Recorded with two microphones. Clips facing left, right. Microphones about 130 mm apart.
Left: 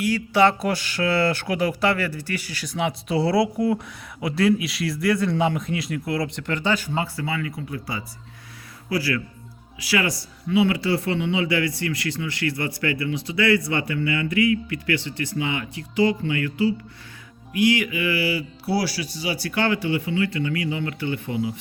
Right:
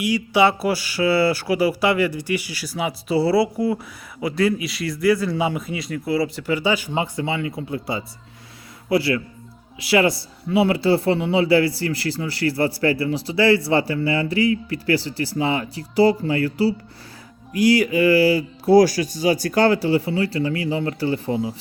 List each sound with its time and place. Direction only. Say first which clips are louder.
0.0 s a man's voice: right 1 dB; 10° right (ahead or behind); by 21.5 s 35° right (ahead or behind)